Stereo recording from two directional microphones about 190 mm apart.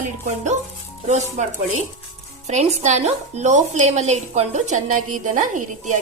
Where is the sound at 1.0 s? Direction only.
40° right (ahead or behind).